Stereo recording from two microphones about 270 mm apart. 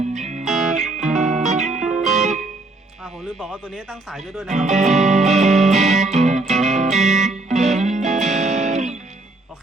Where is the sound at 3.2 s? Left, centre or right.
Centre.